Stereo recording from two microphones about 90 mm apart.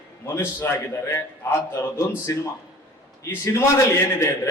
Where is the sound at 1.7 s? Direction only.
35° left (ahead or behind).